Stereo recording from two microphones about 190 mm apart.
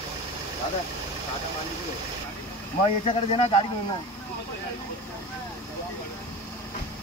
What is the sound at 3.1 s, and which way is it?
Speech, 30° left (ahead or behind).